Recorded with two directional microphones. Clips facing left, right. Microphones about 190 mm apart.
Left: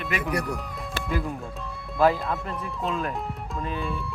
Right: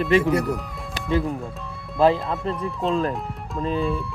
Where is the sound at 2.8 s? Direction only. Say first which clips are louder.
Right 6 dB; centre (ahead or behind).